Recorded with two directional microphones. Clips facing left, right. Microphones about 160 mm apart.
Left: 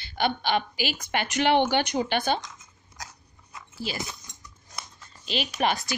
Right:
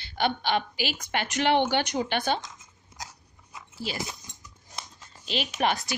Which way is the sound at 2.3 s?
20° right (ahead or behind).